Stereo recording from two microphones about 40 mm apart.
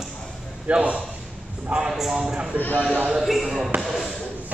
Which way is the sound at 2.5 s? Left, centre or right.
Left.